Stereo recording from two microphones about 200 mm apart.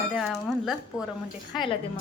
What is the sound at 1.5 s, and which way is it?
Speech, 25° left (ahead or behind).